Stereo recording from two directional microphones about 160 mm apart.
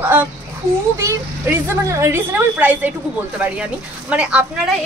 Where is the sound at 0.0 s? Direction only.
10° right (ahead or behind).